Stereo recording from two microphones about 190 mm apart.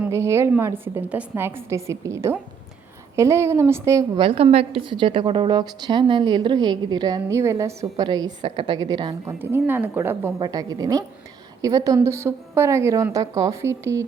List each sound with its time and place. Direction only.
0.0 s a woman's voice: 15° right (ahead or behind)
4.2 s a woman's voice: 30° right (ahead or behind)